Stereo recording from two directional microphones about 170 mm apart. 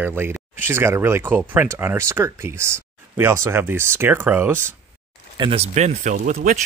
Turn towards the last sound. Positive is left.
turn(degrees=-50)  # may be behind; listen again after turning